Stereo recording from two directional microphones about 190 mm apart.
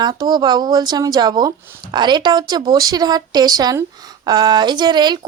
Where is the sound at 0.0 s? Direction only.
20° right (ahead or behind).